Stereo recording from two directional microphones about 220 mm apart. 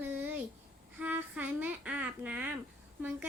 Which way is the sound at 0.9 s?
5° right (ahead or behind).